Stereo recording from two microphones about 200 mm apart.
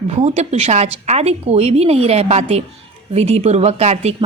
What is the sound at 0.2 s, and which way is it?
A woman's voice, 35° right (ahead or behind).